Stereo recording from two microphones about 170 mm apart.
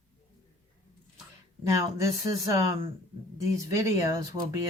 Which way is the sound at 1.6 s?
20° right (ahead or behind).